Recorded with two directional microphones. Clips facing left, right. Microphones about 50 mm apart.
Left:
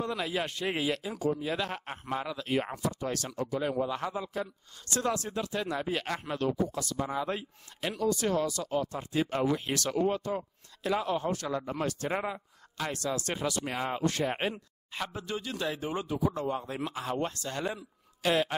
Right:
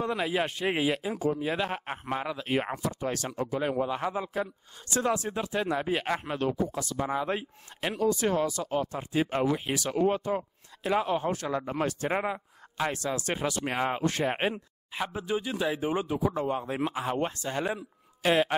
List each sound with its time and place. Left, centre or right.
0.0 s speech: right
14.5 s speech: centre